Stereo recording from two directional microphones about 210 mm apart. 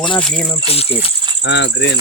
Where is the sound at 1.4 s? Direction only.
60° left (ahead or behind).